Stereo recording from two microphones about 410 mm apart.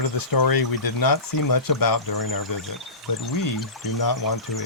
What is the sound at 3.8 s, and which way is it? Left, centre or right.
Speech, left.